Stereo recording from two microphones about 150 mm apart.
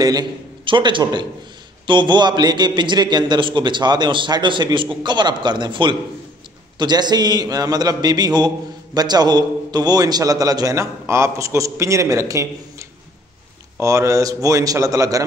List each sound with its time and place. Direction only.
0.0 s a man's voice: 25° right (ahead or behind)